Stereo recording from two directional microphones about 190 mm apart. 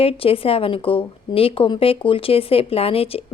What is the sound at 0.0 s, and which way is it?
Speech, 30° left (ahead or behind).